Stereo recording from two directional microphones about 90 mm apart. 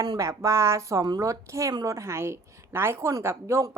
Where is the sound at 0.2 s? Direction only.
35° right (ahead or behind).